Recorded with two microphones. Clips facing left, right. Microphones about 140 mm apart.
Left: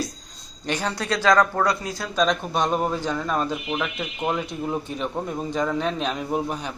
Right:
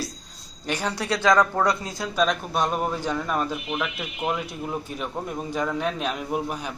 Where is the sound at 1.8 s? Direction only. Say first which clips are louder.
Left 1 dB; 25° right (ahead or behind).